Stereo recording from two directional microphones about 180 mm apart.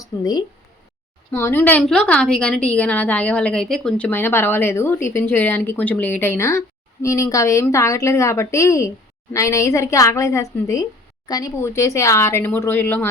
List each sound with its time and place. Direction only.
0.0 s speech: 20° left (ahead or behind)
1.3 s a woman's voice: 10° left (ahead or behind)